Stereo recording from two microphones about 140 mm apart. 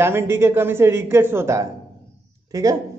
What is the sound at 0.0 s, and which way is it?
A man's voice, 15° right (ahead or behind).